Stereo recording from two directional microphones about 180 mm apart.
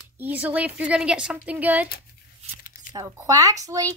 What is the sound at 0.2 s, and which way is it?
A woman's voice, 10° right (ahead or behind).